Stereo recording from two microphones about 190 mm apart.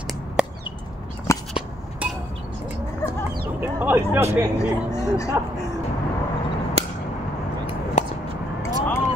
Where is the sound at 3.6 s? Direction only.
10° right (ahead or behind).